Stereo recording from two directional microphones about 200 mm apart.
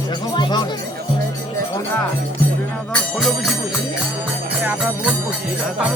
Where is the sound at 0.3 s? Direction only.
25° left (ahead or behind).